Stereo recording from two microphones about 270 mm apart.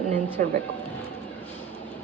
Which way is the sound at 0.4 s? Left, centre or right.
Right.